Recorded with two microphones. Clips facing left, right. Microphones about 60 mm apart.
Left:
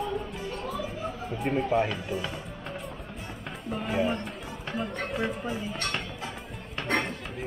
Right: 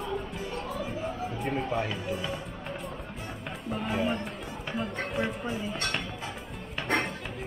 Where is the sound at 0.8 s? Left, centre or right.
Centre.